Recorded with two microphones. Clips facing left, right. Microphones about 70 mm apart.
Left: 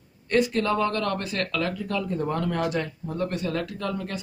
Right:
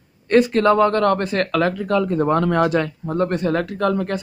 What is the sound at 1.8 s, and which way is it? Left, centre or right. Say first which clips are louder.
Speech: right 9 dB; right.